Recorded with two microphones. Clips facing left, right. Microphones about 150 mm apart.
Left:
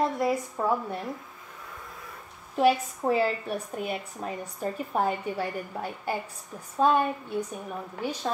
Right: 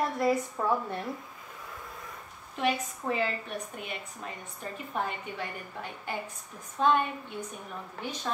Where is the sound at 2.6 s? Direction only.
35° left (ahead or behind).